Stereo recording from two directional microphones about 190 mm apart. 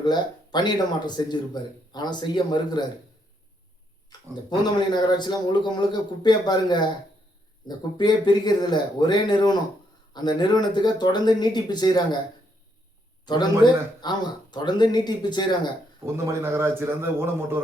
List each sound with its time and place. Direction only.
0.0 s a man's voice: 25° left (ahead or behind)
4.4 s a man's voice: 20° left (ahead or behind)
7.9 s a man's voice: 25° left (ahead or behind)
13.2 s a man's voice: 20° left (ahead or behind)
16.1 s a man's voice: 15° right (ahead or behind)